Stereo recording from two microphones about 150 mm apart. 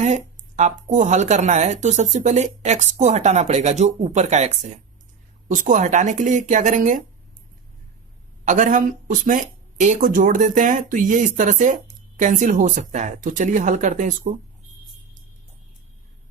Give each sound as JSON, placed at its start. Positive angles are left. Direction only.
{"t": 0.0, "sound": "speech", "side_deg": -50}
{"t": 5.5, "sound": "speech", "side_deg": -60}
{"t": 8.4, "sound": "speech", "side_deg": -55}